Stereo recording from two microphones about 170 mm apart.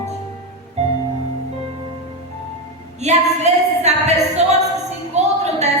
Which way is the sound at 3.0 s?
40° right (ahead or behind).